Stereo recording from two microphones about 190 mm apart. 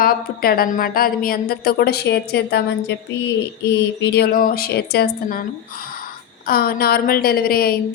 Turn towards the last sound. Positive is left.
turn(degrees=50)  # may be behind; listen again after turning